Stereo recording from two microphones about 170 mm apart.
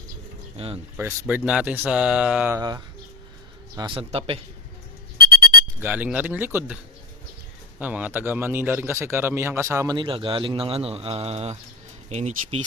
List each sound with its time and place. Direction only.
0.5 s speech: 35° right (ahead or behind)
0.9 s speech: 10° right (ahead or behind)
2.6 s speech: 20° right (ahead or behind)
5.8 s speech: 10° right (ahead or behind)
7.8 s speech: 10° right (ahead or behind); by 12.6 s 40° right (ahead or behind)